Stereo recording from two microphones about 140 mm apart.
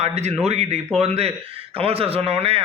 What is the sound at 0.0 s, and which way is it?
A man's voice, 50° right (ahead or behind).